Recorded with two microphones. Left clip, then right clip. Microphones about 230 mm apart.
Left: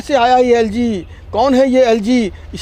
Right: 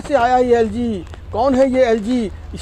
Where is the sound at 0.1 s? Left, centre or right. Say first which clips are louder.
Left 3 dB; left.